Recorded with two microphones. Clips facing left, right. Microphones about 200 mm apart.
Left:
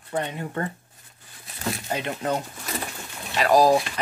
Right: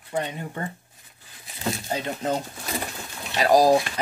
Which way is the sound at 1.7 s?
30° right (ahead or behind).